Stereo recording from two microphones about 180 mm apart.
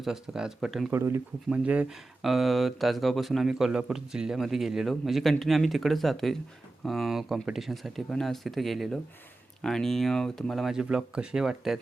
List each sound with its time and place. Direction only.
0.0 s speech: 5° right (ahead or behind)
0.9 s speech: 15° right (ahead or behind)